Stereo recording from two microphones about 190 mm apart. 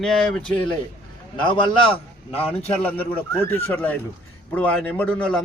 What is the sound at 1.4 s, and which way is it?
A man's voice, 25° left (ahead or behind).